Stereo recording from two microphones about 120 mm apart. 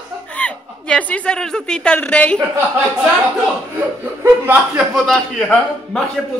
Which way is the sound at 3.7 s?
15° right (ahead or behind).